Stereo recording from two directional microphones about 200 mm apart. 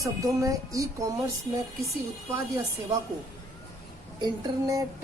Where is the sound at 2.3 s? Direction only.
15° right (ahead or behind).